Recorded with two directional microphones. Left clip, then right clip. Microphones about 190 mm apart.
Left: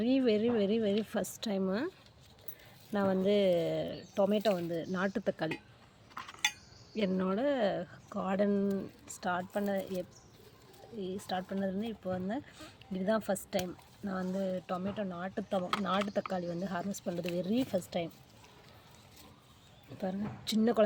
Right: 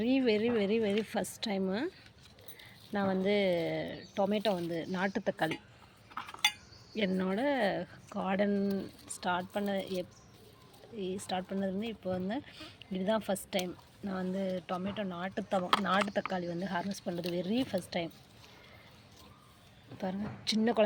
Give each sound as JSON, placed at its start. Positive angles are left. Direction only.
{"t": 0.0, "sound": "speech", "side_deg": 20}
{"t": 2.9, "sound": "speech", "side_deg": 20}
{"t": 6.9, "sound": "speech", "side_deg": 15}
{"t": 20.0, "sound": "speech", "side_deg": 15}